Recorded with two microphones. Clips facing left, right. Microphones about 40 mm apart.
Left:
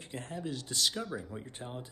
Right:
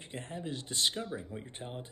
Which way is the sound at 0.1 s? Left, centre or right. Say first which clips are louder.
Left 1 dB; right.